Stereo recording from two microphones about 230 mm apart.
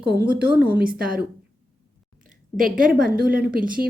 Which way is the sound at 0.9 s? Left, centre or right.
Right.